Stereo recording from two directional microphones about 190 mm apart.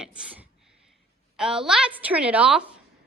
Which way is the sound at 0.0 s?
5° right (ahead or behind).